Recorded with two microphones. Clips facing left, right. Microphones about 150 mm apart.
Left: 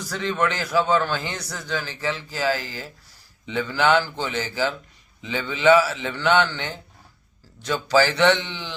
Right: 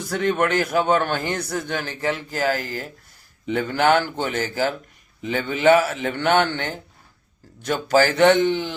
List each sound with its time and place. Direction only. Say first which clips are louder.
0.0 s a man's voice: right 3 dB; 55° right (ahead or behind)